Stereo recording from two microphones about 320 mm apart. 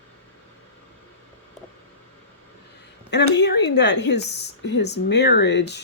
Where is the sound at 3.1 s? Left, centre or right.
Left.